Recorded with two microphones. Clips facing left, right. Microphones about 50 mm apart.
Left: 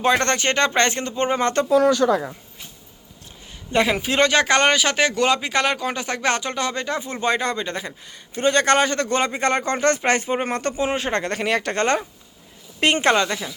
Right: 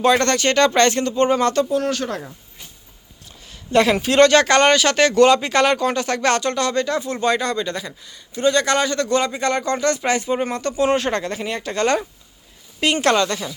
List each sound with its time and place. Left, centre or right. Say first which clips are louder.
0.0 s speech: right 3 dB; left
3.7 s speech: right 4 dB; centre; by 10.8 s left
10.8 s speech: right 9 dB; centre
11.1 s speech: left 2 dB; left
12.8 s a woman's voice: even; left
13.1 s speech: right 3 dB; centre